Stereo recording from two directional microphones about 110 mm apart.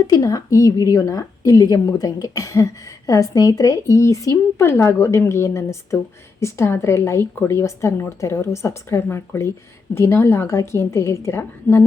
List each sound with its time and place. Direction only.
0.1 s a woman's voice: 30° left (ahead or behind)